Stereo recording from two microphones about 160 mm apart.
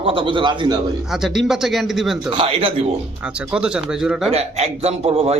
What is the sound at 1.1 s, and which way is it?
Speech, centre (ahead or behind).